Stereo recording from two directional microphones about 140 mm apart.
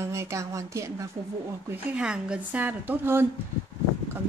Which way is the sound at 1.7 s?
5° right (ahead or behind).